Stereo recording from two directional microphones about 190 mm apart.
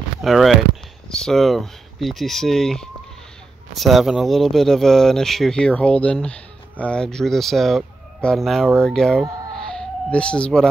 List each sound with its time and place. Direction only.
0.2 s speech: centre (ahead or behind)